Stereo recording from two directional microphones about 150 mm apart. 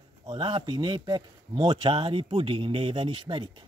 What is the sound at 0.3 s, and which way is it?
Speech, 30° right (ahead or behind).